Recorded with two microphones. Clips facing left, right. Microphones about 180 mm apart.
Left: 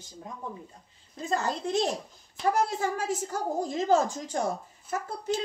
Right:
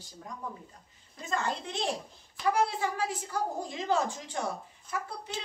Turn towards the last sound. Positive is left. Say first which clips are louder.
# left 7 dB
turn(degrees=45)  # may be behind; listen again after turning